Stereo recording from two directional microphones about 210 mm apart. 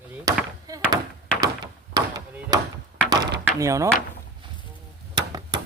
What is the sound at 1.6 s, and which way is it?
Door, 20° right (ahead or behind).